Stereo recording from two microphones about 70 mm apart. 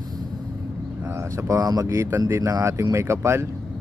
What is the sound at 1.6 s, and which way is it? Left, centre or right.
Speech, right.